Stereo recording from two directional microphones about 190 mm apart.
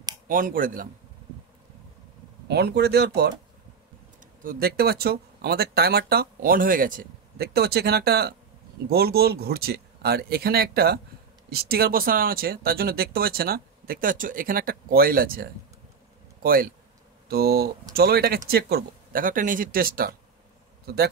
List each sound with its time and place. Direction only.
0.3 s speech: 45° right (ahead or behind)
2.4 s speech: 60° right (ahead or behind)
4.2 s a man's voice: 45° right (ahead or behind)